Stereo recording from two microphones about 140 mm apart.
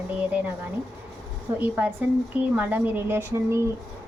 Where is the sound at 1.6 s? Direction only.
10° right (ahead or behind).